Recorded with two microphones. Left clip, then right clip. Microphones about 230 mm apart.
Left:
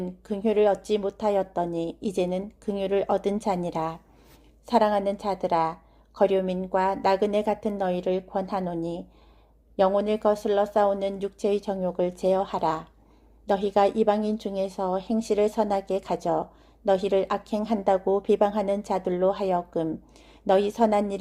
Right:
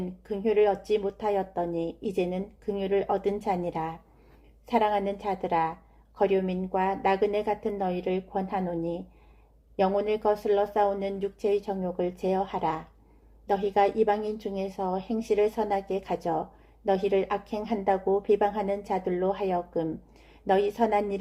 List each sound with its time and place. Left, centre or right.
0.3 s a woman's voice: left